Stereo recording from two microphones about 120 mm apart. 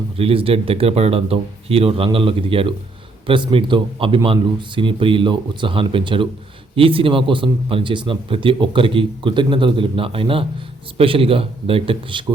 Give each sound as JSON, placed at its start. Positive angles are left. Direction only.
{"t": 0.2, "sound": "a man's voice", "side_deg": -50}